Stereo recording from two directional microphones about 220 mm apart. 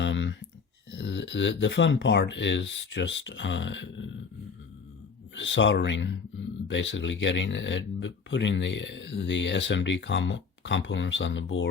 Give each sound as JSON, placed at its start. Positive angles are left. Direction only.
{"t": 0.0, "sound": "a sound", "side_deg": 55}
{"t": 0.9, "sound": "speech", "side_deg": 55}
{"t": 5.3, "sound": "speech", "side_deg": 55}